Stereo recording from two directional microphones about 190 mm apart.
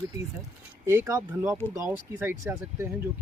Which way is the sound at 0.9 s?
15° right (ahead or behind).